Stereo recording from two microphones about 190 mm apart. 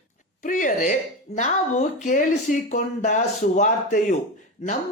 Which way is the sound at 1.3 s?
35° left (ahead or behind).